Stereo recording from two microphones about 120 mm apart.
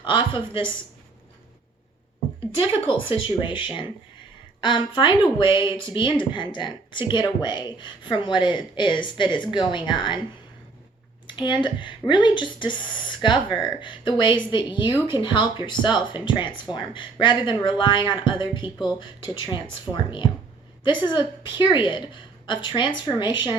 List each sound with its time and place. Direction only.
0.0 s speech: 40° left (ahead or behind)
2.6 s speech: 50° left (ahead or behind)
11.3 s speech: 40° left (ahead or behind)